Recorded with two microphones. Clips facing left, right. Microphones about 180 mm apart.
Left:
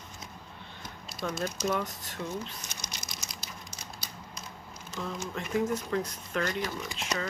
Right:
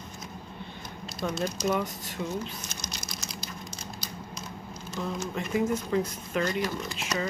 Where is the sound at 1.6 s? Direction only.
Centre (ahead or behind).